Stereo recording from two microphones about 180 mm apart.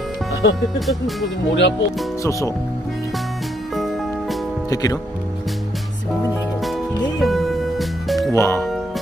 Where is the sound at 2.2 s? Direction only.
15° left (ahead or behind).